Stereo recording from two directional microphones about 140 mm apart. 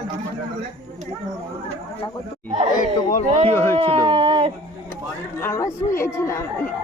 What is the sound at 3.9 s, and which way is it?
Speech, 40° right (ahead or behind).